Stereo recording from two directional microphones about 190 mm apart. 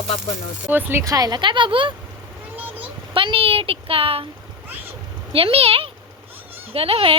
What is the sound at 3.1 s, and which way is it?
Speech, 30° right (ahead or behind).